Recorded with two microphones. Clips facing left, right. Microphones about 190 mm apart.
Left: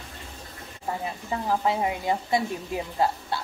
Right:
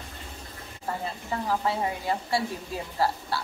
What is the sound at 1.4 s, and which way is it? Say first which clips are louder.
A woman's voice: left 3 dB; 20° left (ahead or behind).